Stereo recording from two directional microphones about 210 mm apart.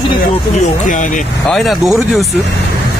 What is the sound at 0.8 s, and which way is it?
Speech, 40° left (ahead or behind).